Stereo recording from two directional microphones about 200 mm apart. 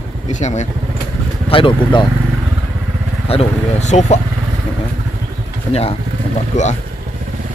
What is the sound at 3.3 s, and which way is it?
Speech, 30° left (ahead or behind).